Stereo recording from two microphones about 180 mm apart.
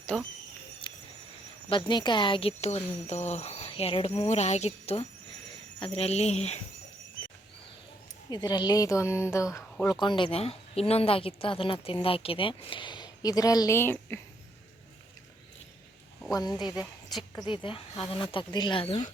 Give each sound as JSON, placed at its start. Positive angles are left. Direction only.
{"t": 0.1, "sound": "speech", "side_deg": 0}
{"t": 0.8, "sound": "a sound", "side_deg": 25}
{"t": 1.9, "sound": "speech", "side_deg": 25}
{"t": 8.3, "sound": "a woman's voice", "side_deg": 25}
{"t": 17.4, "sound": "speech", "side_deg": 30}